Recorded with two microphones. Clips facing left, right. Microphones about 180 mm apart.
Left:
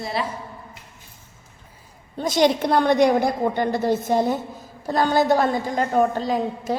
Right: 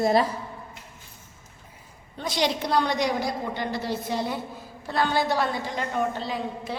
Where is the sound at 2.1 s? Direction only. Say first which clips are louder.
Left 7 dB; 45° left (ahead or behind).